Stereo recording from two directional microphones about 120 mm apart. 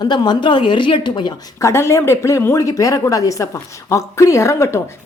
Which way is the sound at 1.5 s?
25° left (ahead or behind).